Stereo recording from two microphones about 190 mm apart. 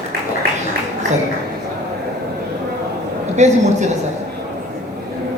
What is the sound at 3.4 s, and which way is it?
Speech, 35° right (ahead or behind).